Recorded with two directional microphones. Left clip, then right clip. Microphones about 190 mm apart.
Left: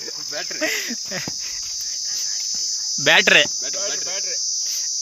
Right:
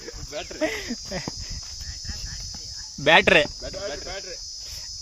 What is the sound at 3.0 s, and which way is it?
Cricket, 5° right (ahead or behind).